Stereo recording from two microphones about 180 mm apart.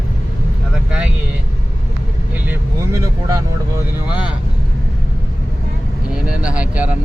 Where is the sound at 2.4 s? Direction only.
15° right (ahead or behind).